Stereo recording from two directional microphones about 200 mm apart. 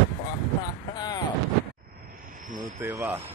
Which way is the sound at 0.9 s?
20° left (ahead or behind).